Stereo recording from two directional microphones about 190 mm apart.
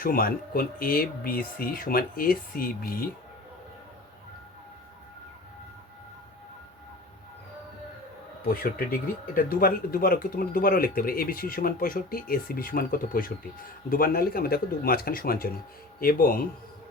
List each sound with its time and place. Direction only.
0.0 s speech: 50° left (ahead or behind)
8.4 s speech: 50° left (ahead or behind)